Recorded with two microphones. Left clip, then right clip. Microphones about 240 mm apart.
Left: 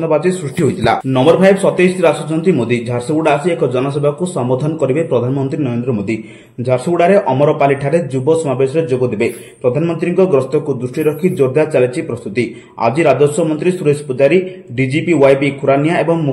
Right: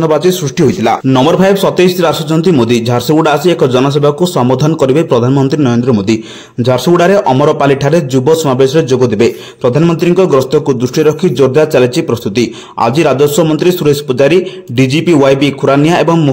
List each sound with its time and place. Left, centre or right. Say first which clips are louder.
0.1 s speech: right 4 dB; right